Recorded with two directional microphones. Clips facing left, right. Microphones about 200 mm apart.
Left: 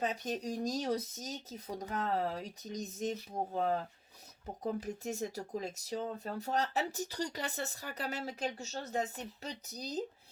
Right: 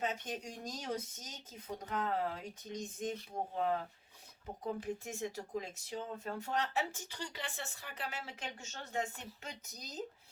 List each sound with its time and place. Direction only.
0.0 s speech: 35° left (ahead or behind)
4.6 s speech: 40° left (ahead or behind)